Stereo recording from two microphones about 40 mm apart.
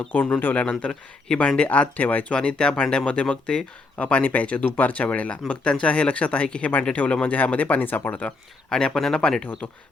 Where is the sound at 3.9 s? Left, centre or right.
Left.